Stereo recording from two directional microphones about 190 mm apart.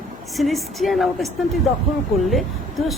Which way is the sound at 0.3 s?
Centre (ahead or behind).